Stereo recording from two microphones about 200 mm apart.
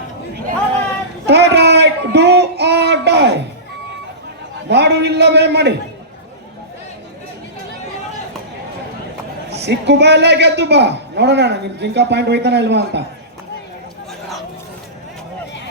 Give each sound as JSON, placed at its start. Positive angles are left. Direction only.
{"t": 1.3, "sound": "a sound", "side_deg": -55}
{"t": 4.7, "sound": "a man's voice", "side_deg": -55}
{"t": 9.5, "sound": "a man's voice", "side_deg": -55}